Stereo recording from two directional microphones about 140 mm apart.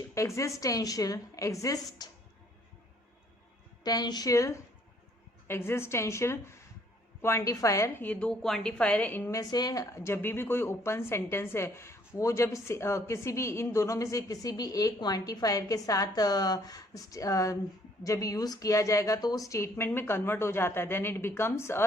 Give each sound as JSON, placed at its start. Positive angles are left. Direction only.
{"t": 0.1, "sound": "a woman's voice", "side_deg": 20}
{"t": 3.8, "sound": "a woman's voice", "side_deg": 30}